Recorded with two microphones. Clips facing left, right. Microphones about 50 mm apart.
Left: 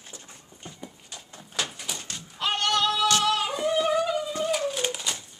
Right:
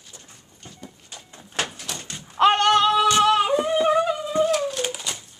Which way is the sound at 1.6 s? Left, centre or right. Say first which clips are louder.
Right 4 dB; right.